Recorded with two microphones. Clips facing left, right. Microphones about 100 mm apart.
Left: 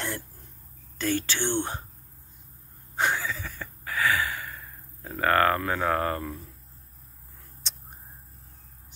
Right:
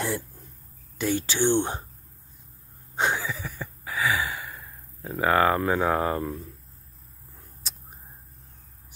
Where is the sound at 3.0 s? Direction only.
15° right (ahead or behind).